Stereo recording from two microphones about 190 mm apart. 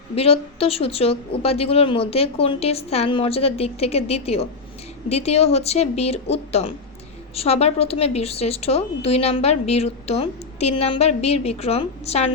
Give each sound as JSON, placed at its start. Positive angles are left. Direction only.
{"t": 0.2, "sound": "a woman's voice", "side_deg": 30}